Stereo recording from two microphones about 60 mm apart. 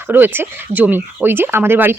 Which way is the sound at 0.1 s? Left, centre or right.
Right.